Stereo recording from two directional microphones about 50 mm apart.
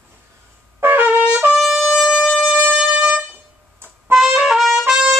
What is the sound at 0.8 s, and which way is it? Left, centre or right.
Brass instrument, right.